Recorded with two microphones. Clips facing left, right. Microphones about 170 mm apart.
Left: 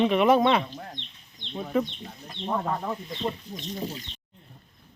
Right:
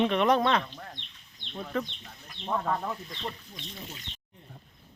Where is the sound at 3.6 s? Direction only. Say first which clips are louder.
Left 10 dB; 35° left (ahead or behind).